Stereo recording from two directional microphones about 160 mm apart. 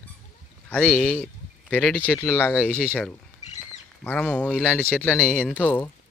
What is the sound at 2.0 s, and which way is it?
Speech, 15° left (ahead or behind).